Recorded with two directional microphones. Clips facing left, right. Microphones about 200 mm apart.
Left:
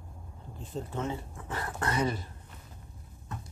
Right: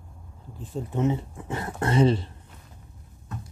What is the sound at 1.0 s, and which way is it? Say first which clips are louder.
Speech: right 10 dB; 20° right (ahead or behind).